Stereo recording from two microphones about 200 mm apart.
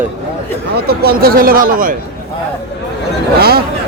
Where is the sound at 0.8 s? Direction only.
50° right (ahead or behind).